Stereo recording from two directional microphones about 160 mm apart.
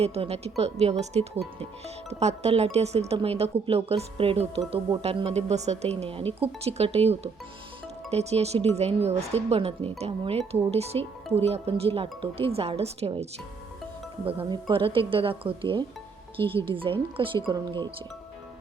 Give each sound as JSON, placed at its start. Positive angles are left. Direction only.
{"t": 0.0, "sound": "speech", "side_deg": -40}
{"t": 14.3, "sound": "speech", "side_deg": -35}